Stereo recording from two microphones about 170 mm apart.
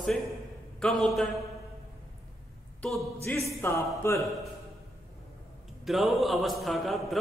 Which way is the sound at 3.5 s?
15° left (ahead or behind).